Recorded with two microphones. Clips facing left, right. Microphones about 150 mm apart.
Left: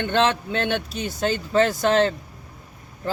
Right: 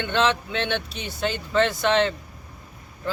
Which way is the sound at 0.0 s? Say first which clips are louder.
Left 2 dB; 45° left (ahead or behind).